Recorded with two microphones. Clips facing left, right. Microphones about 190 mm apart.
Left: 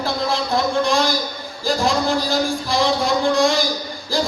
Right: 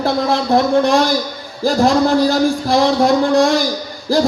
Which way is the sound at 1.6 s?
60° right (ahead or behind).